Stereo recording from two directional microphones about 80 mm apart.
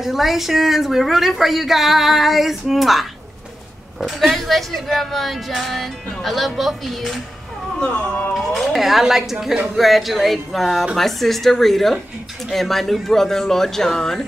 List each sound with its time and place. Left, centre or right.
0.0 s a woman's voice: centre
4.1 s a woman's voice: centre
7.8 s speech: centre
8.3 s a woman's voice: centre